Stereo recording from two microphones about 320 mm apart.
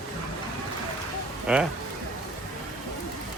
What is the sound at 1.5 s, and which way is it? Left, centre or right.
Speech, centre.